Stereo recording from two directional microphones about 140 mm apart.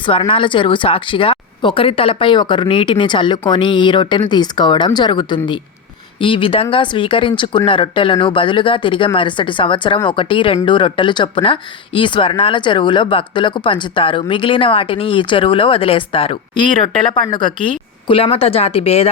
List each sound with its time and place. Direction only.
0.0 s speech: 40° left (ahead or behind)